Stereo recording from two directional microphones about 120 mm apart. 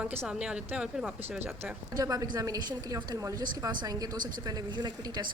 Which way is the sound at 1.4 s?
20° right (ahead or behind).